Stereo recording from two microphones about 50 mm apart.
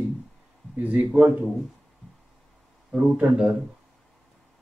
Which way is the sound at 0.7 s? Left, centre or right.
Right.